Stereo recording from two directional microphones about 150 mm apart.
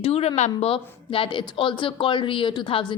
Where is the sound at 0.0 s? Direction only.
40° left (ahead or behind).